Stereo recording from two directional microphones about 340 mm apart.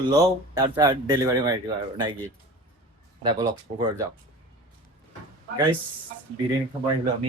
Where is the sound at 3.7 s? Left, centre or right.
Right.